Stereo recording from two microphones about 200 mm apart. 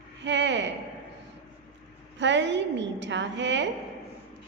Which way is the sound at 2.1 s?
65° right (ahead or behind).